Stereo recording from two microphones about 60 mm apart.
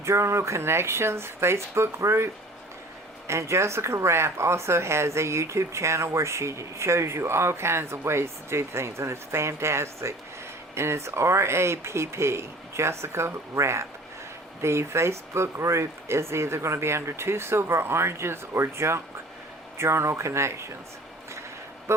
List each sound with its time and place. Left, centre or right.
0.0 s speech: right
21.9 s speech: right